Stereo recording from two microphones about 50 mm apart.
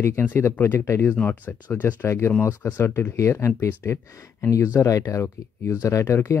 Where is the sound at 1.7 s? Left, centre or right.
Left.